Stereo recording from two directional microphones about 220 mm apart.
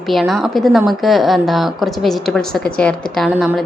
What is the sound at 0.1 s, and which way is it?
A woman's voice, centre (ahead or behind).